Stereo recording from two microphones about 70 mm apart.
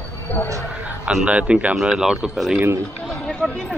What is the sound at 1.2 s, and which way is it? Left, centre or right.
Speech, centre.